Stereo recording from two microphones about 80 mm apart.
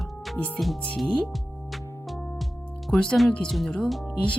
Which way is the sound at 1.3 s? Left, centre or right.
Centre.